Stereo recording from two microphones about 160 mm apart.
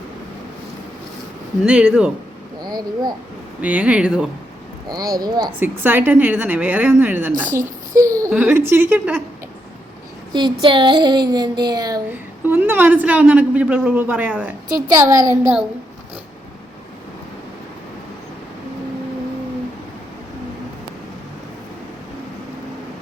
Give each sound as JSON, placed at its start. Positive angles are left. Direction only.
{"t": 1.6, "sound": "speech", "side_deg": -5}
{"t": 2.6, "sound": "a child's voice", "side_deg": -25}
{"t": 3.6, "sound": "a woman's voice", "side_deg": -10}
{"t": 4.9, "sound": "speech", "side_deg": -25}
{"t": 5.5, "sound": "a woman's voice", "side_deg": -10}
{"t": 10.3, "sound": "speech", "side_deg": -30}
{"t": 12.1, "sound": "a woman's voice", "side_deg": -10}
{"t": 14.8, "sound": "speech", "side_deg": -20}